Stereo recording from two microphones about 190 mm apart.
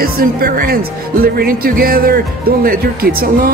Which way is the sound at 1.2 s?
50° right (ahead or behind).